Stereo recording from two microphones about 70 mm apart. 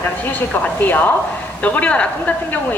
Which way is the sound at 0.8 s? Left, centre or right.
Left.